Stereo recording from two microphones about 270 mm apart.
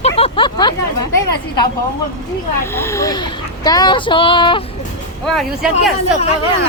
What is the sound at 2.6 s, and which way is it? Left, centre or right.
Speech, centre.